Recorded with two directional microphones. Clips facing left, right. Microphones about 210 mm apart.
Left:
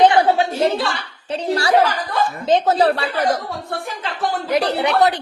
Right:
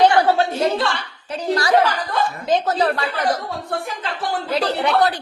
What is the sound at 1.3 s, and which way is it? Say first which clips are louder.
Speech: left 1 dB; 30° left (ahead or behind).